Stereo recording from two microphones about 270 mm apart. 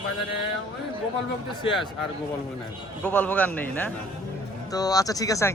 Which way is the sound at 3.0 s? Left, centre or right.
Centre.